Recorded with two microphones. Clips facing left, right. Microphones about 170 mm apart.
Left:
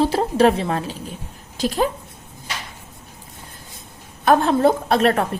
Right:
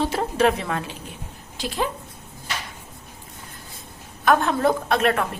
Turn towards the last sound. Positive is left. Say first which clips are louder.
# left 3 dB
turn(degrees=35)  # may be behind; listen again after turning